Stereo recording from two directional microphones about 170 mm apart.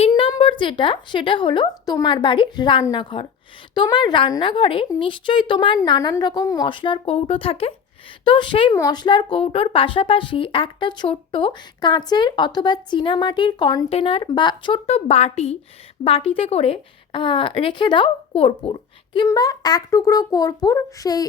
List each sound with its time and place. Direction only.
0.1 s speech: 30° left (ahead or behind)